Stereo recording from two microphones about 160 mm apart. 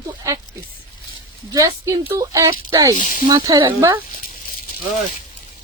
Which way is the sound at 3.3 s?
25° right (ahead or behind).